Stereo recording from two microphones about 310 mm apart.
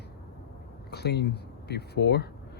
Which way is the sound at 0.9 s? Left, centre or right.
Left.